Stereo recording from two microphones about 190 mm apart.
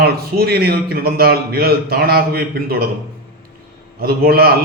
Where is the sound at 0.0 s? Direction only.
55° right (ahead or behind).